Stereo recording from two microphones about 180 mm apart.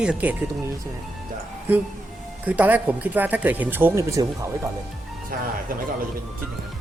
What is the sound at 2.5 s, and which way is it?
Speech, 10° right (ahead or behind).